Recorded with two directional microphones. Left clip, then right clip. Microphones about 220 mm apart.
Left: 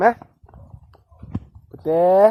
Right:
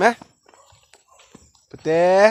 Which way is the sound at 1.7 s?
25° right (ahead or behind).